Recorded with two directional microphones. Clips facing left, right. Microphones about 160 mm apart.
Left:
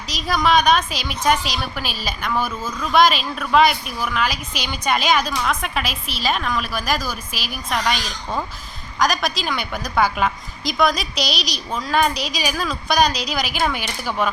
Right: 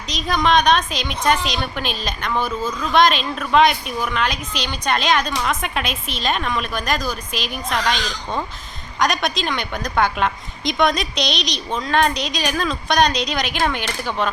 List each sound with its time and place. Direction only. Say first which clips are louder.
0.1 s a woman's voice: even; 5° left (ahead or behind)